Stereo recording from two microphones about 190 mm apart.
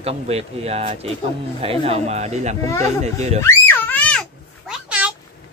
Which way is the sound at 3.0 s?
35° right (ahead or behind).